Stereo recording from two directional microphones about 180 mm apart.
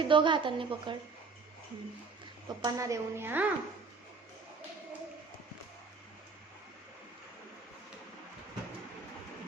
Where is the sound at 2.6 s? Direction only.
20° right (ahead or behind).